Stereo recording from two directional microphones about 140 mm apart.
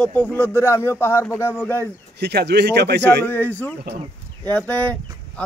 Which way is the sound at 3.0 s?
15° left (ahead or behind).